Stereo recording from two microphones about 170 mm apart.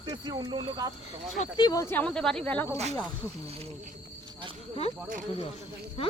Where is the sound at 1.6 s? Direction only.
20° left (ahead or behind).